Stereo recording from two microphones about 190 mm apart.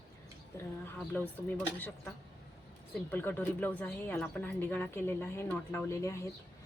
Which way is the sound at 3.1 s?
10° left (ahead or behind).